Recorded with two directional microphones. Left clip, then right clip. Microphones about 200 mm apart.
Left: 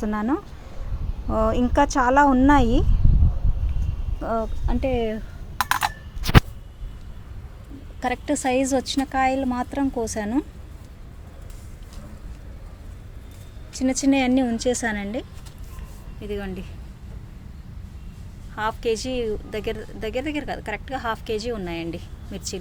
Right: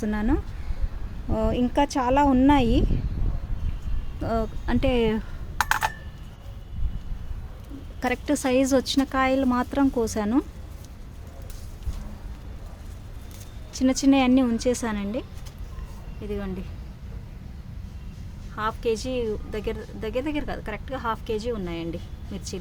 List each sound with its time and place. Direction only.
0.0 s a woman's voice: 5° right (ahead or behind)
4.2 s speech: 20° right (ahead or behind)
8.0 s speech: 15° right (ahead or behind)
13.7 s speech: 15° right (ahead or behind)
16.3 s a woman's voice: 5° left (ahead or behind)
18.5 s a woman's voice: centre (ahead or behind)